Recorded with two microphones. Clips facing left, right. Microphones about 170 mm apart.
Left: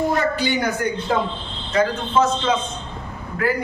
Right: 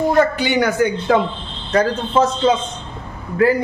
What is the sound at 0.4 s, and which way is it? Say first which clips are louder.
Speech: right 5 dB; 80° right.